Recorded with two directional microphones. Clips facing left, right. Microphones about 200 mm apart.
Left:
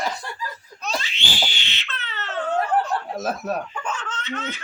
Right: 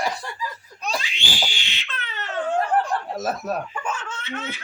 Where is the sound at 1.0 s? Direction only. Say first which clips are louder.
Even; 15° right (ahead or behind).